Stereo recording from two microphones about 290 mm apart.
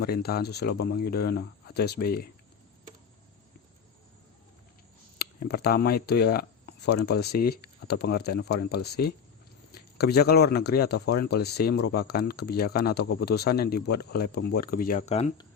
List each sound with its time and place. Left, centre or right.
0.0 s speech: left
5.2 s speech: left